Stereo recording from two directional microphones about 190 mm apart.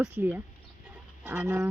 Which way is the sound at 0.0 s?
10° right (ahead or behind).